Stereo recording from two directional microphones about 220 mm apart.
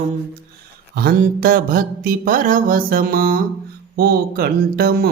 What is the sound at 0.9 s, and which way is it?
Mantra, 45° right (ahead or behind).